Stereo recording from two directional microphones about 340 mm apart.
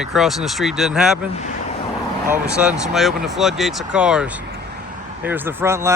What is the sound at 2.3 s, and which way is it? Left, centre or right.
Speech, centre.